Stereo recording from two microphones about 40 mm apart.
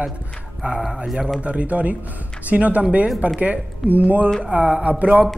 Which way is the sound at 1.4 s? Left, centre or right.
Right.